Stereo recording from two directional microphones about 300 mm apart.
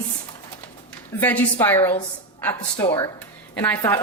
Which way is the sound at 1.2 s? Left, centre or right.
Centre.